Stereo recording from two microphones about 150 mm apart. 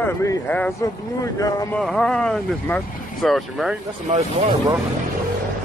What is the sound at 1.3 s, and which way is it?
Male singing, 25° left (ahead or behind).